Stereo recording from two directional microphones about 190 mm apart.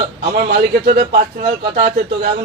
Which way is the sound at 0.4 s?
60° right (ahead or behind).